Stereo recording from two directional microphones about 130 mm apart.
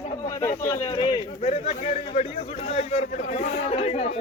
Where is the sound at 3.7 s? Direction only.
55° left (ahead or behind).